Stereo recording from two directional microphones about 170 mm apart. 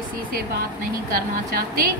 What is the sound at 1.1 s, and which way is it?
Speech, 60° right (ahead or behind).